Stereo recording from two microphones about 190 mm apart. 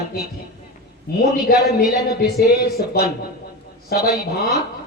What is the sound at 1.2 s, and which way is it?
Music, 55° left (ahead or behind).